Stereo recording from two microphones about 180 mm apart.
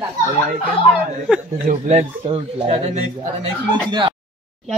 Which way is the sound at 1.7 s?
40° right (ahead or behind).